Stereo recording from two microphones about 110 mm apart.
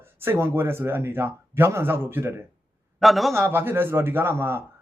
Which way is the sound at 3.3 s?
20° right (ahead or behind).